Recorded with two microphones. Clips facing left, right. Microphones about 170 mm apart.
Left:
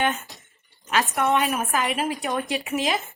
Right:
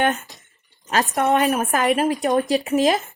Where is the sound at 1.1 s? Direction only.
40° right (ahead or behind).